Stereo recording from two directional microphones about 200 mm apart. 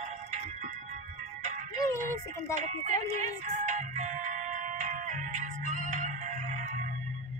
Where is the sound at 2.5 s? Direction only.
35° right (ahead or behind).